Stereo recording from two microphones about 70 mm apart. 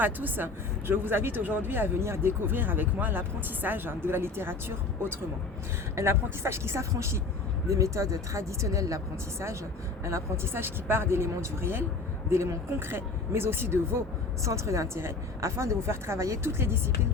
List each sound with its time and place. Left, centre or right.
0.0 s speech: right
6.0 s a woman's voice: right
10.0 s speech: right
14.4 s a woman's voice: right
16.5 s speech: right